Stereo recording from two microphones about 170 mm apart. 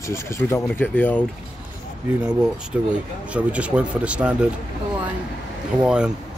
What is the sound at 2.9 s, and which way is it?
Speech, 10° right (ahead or behind).